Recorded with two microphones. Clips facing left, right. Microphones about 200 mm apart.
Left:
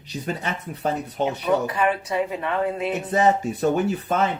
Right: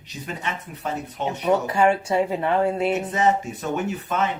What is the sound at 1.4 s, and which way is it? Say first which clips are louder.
Speech: right 4 dB; 30° right (ahead or behind).